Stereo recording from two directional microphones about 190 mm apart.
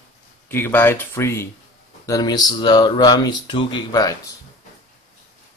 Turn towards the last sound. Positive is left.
turn(degrees=20)  # may be behind; listen again after turning